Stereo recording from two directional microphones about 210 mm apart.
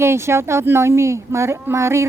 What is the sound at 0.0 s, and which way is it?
Speech, 10° right (ahead or behind).